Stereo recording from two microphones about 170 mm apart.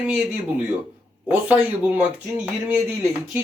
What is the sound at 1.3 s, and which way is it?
A man's voice, 10° right (ahead or behind).